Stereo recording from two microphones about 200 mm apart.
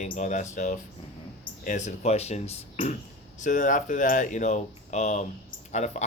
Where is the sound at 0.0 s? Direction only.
35° left (ahead or behind).